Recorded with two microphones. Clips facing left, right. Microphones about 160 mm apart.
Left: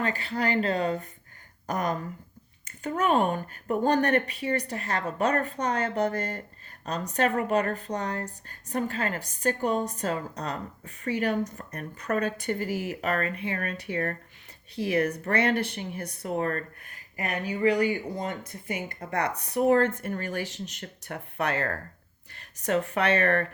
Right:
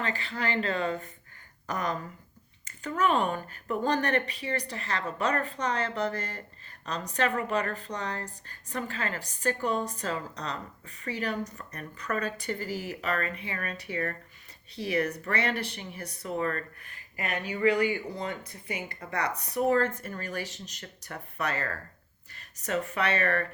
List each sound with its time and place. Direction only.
0.0 s speech: 45° left (ahead or behind)